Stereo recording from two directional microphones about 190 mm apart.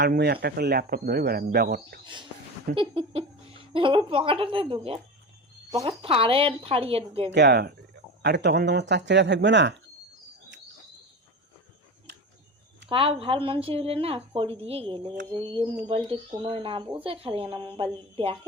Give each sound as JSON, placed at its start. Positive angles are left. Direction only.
{"t": 0.1, "sound": "speech", "side_deg": -55}
{"t": 2.7, "sound": "speech", "side_deg": -30}
{"t": 7.3, "sound": "speech", "side_deg": -60}
{"t": 12.9, "sound": "speech", "side_deg": -30}